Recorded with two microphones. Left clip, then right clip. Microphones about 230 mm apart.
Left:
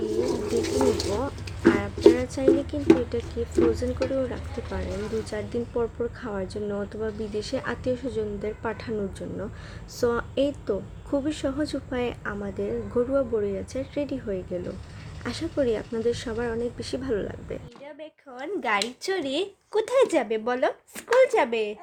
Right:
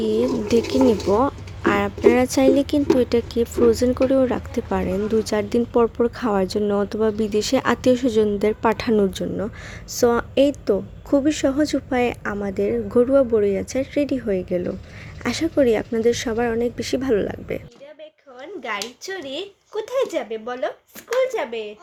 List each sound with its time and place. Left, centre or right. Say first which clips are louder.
1.7 s speech: right 5 dB; right
9.9 s a woman's voice: right 7 dB; right
18.3 s speech: left 2 dB; left